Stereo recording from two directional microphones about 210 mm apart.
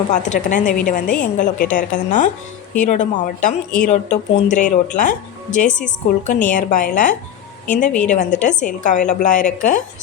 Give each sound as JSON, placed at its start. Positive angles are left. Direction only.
{"t": 0.1, "sound": "speech", "side_deg": 35}